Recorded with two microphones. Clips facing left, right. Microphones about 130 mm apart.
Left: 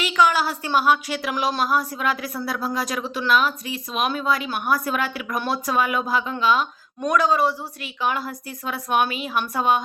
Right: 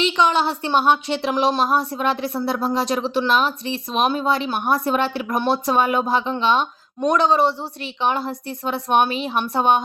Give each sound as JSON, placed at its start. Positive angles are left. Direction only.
{"t": 0.0, "sound": "speech", "side_deg": -25}